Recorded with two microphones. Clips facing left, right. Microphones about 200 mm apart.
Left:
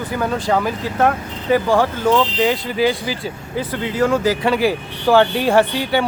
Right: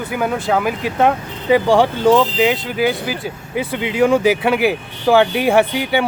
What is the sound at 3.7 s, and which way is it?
Speech, 15° right (ahead or behind).